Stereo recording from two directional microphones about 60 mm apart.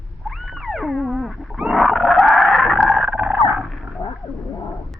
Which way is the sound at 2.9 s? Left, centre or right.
Centre.